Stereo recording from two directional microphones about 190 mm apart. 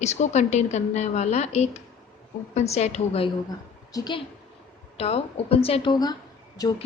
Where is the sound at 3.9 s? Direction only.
20° left (ahead or behind).